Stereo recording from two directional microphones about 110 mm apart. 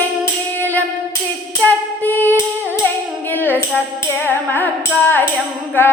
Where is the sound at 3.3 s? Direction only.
15° left (ahead or behind).